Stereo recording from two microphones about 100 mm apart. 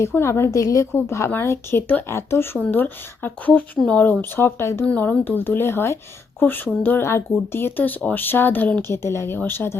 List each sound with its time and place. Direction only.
0.1 s a woman's voice: 25° left (ahead or behind)